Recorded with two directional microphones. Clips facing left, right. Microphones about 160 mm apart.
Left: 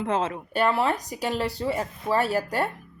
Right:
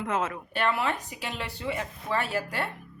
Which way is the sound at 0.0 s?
30° left (ahead or behind).